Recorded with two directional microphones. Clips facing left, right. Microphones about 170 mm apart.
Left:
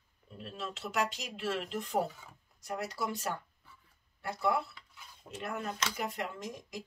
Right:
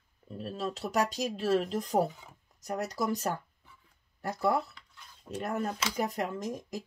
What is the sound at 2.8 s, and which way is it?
Speech, 40° right (ahead or behind).